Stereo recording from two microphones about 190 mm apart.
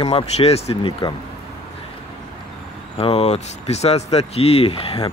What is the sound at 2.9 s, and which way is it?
Speech, 30° left (ahead or behind).